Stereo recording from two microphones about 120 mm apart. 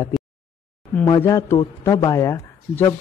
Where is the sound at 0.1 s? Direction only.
Centre (ahead or behind).